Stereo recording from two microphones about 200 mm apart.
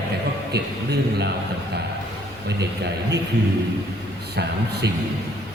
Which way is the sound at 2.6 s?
55° right (ahead or behind).